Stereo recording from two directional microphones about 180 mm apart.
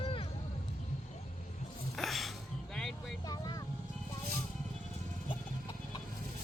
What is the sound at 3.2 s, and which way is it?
Vehicle, 20° left (ahead or behind).